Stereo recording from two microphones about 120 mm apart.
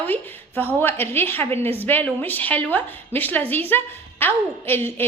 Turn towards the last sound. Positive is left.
turn(degrees=20)  # may be behind; listen again after turning